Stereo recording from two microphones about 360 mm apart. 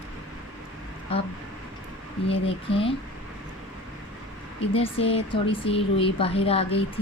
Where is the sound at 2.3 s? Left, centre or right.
Centre.